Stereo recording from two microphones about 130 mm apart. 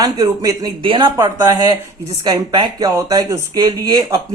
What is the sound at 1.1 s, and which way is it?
Speech, 25° right (ahead or behind).